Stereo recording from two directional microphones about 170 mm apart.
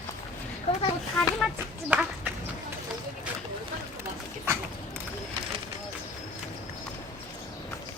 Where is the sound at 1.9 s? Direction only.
10° right (ahead or behind).